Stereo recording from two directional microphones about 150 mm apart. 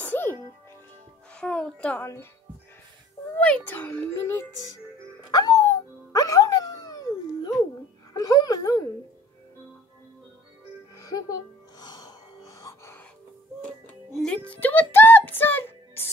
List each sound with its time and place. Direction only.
0.0 s music: 10° left (ahead or behind)
1.3 s a child's voice: 10° left (ahead or behind)
3.3 s a child's voice: 10° left (ahead or behind)
5.3 s music: 25° left (ahead or behind)
8.1 s a sound: 25° left (ahead or behind)
11.0 s music: 25° left (ahead or behind)
14.1 s music: 5° left (ahead or behind)